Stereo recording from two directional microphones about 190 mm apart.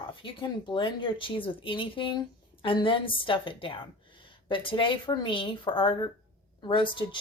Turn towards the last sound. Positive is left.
turn(degrees=25)  # may be behind; listen again after turning